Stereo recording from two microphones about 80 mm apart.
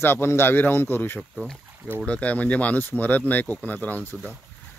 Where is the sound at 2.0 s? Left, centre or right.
Centre.